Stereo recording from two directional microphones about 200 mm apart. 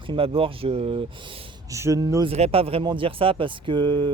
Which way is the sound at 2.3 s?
30° right (ahead or behind).